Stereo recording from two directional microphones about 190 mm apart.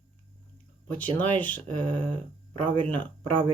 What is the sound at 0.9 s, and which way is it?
Speech, 10° left (ahead or behind).